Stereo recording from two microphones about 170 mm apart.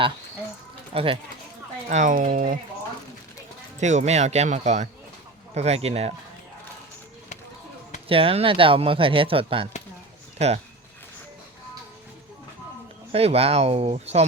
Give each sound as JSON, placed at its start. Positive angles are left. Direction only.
{"t": 0.9, "sound": "speech", "side_deg": -30}
{"t": 1.9, "sound": "speech", "side_deg": -45}
{"t": 3.8, "sound": "speech", "side_deg": -45}
{"t": 8.0, "sound": "speech", "side_deg": -35}
{"t": 13.1, "sound": "speech", "side_deg": -35}